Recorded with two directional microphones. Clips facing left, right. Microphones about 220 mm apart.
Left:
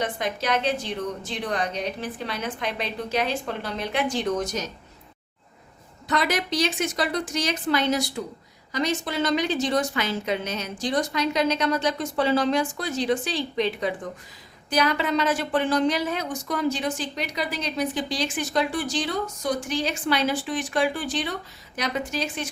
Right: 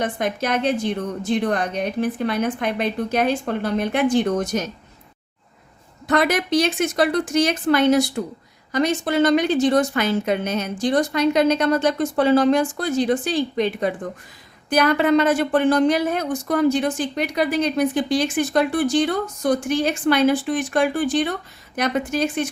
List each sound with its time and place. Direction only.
0.0 s a woman's voice: 50° right (ahead or behind)
6.1 s a woman's voice: 55° right (ahead or behind)